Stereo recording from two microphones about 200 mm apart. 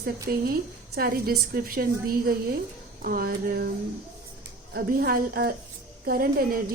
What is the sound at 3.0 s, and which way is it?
Speech, 45° right (ahead or behind).